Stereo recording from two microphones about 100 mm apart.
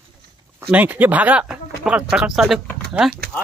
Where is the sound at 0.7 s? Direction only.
15° right (ahead or behind).